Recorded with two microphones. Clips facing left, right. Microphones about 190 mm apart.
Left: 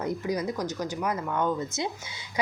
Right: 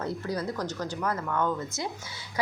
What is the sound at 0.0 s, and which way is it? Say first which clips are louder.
Speech: left 2 dB; 15° left (ahead or behind).